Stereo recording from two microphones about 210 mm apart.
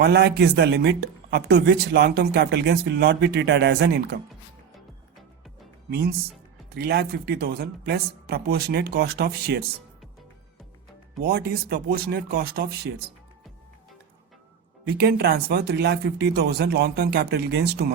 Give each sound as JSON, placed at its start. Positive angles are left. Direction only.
{"t": 0.0, "sound": "speech", "side_deg": -50}
{"t": 6.7, "sound": "speech", "side_deg": -50}
{"t": 11.2, "sound": "speech", "side_deg": -50}
{"t": 14.8, "sound": "speech", "side_deg": -50}